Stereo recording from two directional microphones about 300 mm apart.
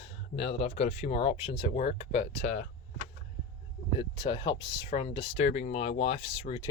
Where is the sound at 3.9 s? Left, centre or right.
Centre.